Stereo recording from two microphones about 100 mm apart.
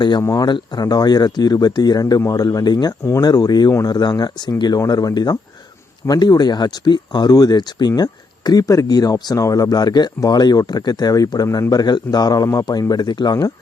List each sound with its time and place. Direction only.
0.2 s speech: 30° left (ahead or behind)
0.4 s speech: 50° left (ahead or behind)
3.0 s speech: 30° left (ahead or behind)
3.2 s speech: 40° left (ahead or behind)
11.4 s speech: 25° left (ahead or behind)
11.7 s speech: 45° left (ahead or behind)